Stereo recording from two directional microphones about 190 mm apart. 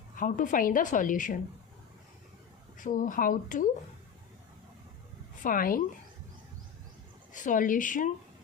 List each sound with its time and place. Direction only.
0.2 s a woman's voice: 45° left (ahead or behind)
2.7 s a woman's voice: 45° left (ahead or behind)
5.4 s a woman's voice: 45° left (ahead or behind)
7.3 s a woman's voice: 45° left (ahead or behind)